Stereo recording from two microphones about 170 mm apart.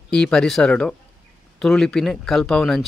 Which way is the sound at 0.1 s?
5° left (ahead or behind).